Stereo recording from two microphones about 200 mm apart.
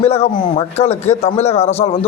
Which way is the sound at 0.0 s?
30° left (ahead or behind).